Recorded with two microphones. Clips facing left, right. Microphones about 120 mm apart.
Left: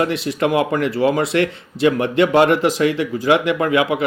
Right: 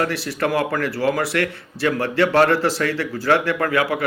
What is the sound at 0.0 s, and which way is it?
Speech, 20° left (ahead or behind).